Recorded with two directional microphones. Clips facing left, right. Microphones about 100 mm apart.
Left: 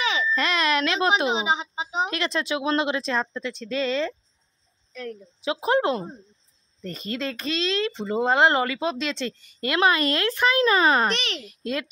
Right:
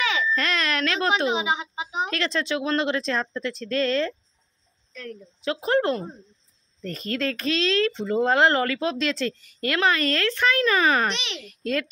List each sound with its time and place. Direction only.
0.0 s a sound: 20° left (ahead or behind)
0.3 s a sound: 5° left (ahead or behind); by 2.0 s 25° left (ahead or behind)
2.0 s speech: 5° left (ahead or behind)
4.9 s a woman's voice: 15° left (ahead or behind)
11.1 s a child's voice: 45° left (ahead or behind)
11.4 s a child's voice: 5° left (ahead or behind)